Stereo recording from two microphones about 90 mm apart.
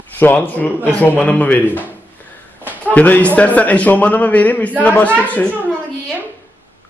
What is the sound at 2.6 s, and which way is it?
Speech, 20° left (ahead or behind).